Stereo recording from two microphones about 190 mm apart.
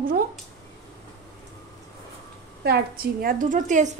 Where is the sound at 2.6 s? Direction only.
55° right (ahead or behind).